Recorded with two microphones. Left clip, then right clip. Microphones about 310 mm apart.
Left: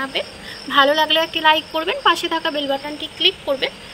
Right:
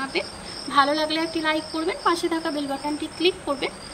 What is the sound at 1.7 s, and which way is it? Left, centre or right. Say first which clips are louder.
Speech: left 6 dB; centre.